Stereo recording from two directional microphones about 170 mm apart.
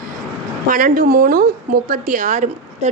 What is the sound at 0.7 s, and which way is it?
A woman's voice, 55° right (ahead or behind).